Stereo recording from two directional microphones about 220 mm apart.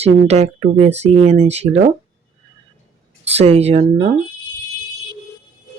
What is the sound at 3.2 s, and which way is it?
Speech, 30° right (ahead or behind).